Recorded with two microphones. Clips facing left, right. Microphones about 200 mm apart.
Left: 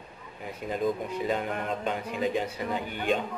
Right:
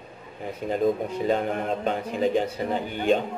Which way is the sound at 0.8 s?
35° right (ahead or behind).